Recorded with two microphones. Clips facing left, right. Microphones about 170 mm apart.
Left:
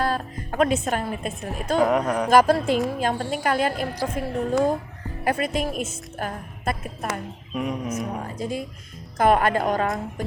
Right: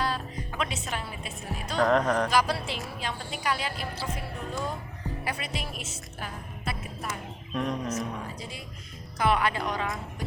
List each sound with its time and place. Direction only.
0.0 s a woman's voice: 50° left (ahead or behind)
1.8 s speech: 10° left (ahead or behind)
2.3 s a woman's voice: 50° left (ahead or behind)
5.2 s a woman's voice: 50° left (ahead or behind)
7.5 s speech: 10° left (ahead or behind)
8.4 s a woman's voice: 45° left (ahead or behind)